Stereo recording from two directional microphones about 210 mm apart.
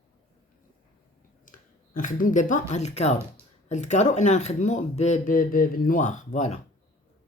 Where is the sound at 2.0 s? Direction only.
40° left (ahead or behind).